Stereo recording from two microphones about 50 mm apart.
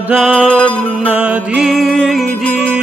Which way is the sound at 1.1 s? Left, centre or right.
Right.